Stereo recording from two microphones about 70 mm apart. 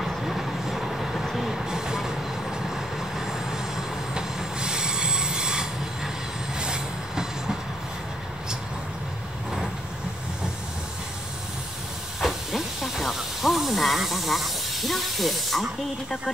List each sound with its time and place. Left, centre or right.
0.0 s train: centre
12.2 s hiss: centre